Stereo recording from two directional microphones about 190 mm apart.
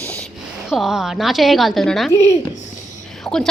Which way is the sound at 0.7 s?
Centre (ahead or behind).